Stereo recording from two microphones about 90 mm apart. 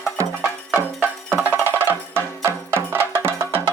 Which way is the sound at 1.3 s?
20° right (ahead or behind).